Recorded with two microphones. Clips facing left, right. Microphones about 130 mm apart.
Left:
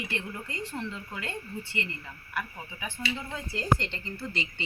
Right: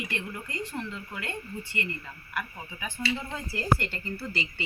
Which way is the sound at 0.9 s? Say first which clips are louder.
Even; 20° left (ahead or behind).